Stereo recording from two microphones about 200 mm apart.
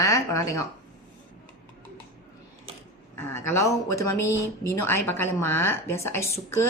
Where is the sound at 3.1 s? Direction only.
10° left (ahead or behind).